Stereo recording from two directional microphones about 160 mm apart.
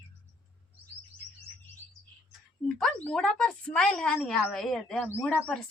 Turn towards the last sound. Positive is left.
turn(degrees=5)  # may be behind; listen again after turning